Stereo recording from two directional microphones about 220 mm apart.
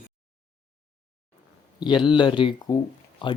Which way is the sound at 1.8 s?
20° left (ahead or behind).